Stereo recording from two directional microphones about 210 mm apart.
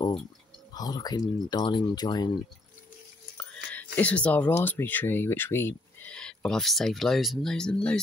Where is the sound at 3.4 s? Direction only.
5° left (ahead or behind).